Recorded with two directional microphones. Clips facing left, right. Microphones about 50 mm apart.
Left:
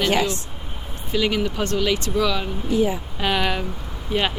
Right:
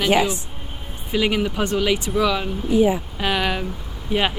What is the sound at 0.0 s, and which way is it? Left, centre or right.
Speech, centre.